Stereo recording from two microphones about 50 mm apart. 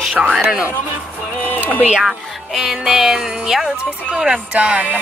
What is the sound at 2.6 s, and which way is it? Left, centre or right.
Music, centre.